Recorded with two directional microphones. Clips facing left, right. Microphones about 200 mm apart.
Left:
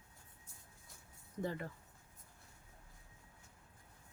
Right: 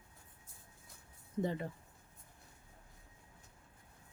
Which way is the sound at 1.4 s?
20° right (ahead or behind).